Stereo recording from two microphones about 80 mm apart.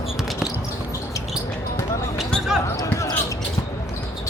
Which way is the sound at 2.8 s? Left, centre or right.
Left.